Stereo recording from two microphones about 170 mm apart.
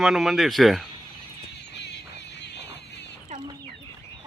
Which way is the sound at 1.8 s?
90° left.